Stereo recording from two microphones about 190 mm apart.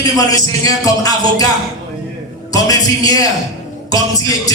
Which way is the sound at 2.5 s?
20° left (ahead or behind).